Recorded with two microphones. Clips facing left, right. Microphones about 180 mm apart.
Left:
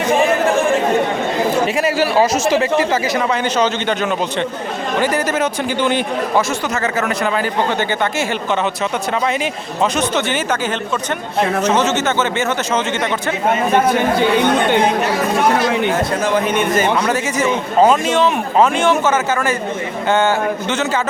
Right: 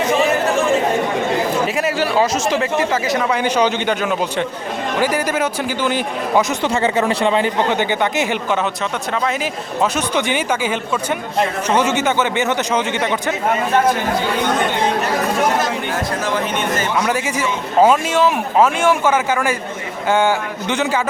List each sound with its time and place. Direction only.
1.7 s speech: 5° left (ahead or behind)
3.3 s a man's voice: 10° right (ahead or behind)
6.8 s a man's voice: 30° right (ahead or behind)
9.2 s a man's voice: 5° right (ahead or behind)
17.7 s a man's voice: 5° right (ahead or behind)